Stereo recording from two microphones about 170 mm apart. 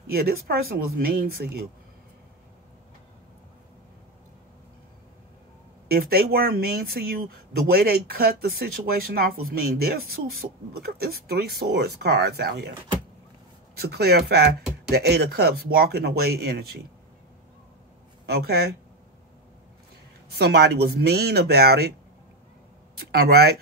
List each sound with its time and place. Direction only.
0.1 s speech: 65° right (ahead or behind)
5.9 s speech: 65° right (ahead or behind)
13.7 s speech: 70° right (ahead or behind)
18.2 s speech: 70° right (ahead or behind)
20.3 s speech: 75° right (ahead or behind)
22.9 s speech: 70° right (ahead or behind)